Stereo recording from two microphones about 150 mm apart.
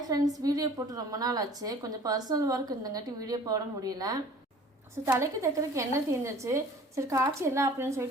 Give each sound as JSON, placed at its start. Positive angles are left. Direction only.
{"t": 0.3, "sound": "a woman's voice", "side_deg": -25}